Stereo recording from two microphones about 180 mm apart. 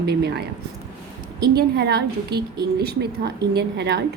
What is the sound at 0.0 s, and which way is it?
A woman's voice, 65° right (ahead or behind).